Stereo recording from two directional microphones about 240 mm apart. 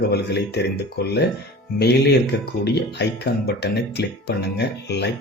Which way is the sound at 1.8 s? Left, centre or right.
Left.